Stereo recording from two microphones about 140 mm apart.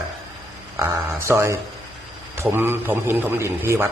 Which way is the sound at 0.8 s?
20° right (ahead or behind).